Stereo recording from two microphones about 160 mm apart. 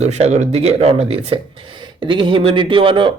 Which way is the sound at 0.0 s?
45° right (ahead or behind).